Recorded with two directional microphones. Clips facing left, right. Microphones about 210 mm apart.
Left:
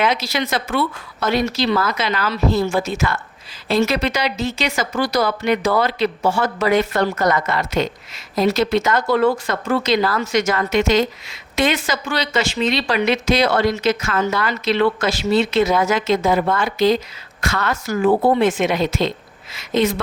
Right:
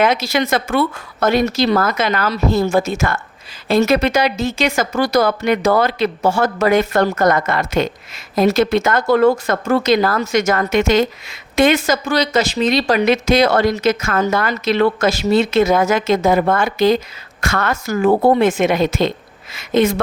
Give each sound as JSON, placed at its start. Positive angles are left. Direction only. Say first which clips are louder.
{"t": 0.0, "sound": "speech", "louder": "right 4 dB", "side_deg": -50}